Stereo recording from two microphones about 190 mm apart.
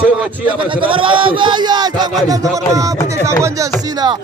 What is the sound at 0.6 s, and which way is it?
Speech, 25° right (ahead or behind).